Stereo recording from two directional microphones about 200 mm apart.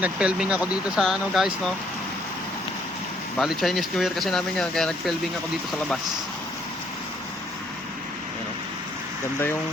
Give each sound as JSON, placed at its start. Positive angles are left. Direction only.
{"t": 0.0, "sound": "speech", "side_deg": -5}
{"t": 3.3, "sound": "speech", "side_deg": 0}